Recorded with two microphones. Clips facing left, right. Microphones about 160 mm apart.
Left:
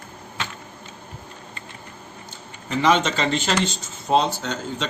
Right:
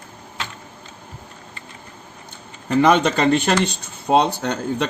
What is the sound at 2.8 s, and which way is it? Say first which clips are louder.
Speech: right 4 dB; 55° right (ahead or behind).